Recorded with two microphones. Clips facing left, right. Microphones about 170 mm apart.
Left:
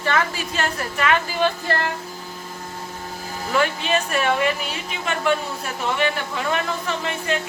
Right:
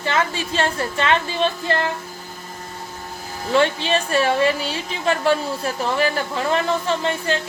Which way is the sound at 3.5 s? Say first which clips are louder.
Right 3 dB; 30° right (ahead or behind).